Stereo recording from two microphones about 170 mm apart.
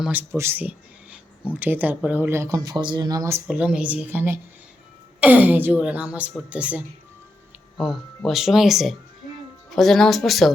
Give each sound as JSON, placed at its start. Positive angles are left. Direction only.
{"t": 0.0, "sound": "speech", "side_deg": -10}
{"t": 3.4, "sound": "speech", "side_deg": -5}